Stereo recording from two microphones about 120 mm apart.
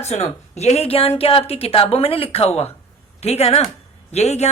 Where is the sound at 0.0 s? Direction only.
65° left (ahead or behind).